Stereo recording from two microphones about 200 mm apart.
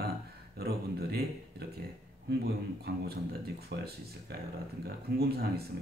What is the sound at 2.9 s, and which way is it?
Speech, 55° right (ahead or behind).